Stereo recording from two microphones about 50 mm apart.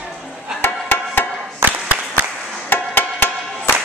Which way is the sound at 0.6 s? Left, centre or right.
Left.